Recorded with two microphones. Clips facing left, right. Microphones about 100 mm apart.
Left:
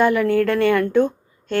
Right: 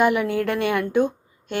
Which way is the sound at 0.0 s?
15° right (ahead or behind).